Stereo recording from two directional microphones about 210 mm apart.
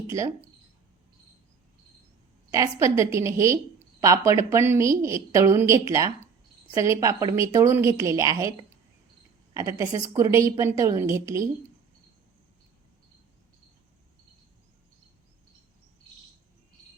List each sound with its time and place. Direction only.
2.5 s a woman's voice: 15° right (ahead or behind)
9.6 s a woman's voice: 15° right (ahead or behind)